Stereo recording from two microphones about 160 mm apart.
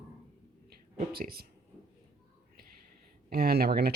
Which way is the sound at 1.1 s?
70° right (ahead or behind).